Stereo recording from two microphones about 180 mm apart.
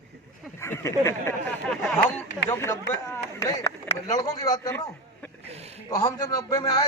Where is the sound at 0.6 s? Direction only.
15° left (ahead or behind).